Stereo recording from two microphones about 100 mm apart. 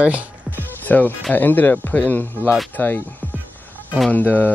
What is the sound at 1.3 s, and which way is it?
Speech, 20° left (ahead or behind).